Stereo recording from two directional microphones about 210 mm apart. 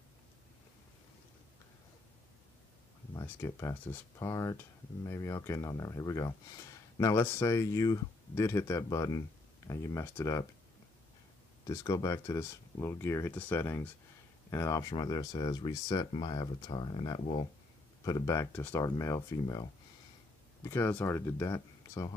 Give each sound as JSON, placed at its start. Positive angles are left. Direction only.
{"t": 3.2, "sound": "speech", "side_deg": 15}
{"t": 11.6, "sound": "speech", "side_deg": 15}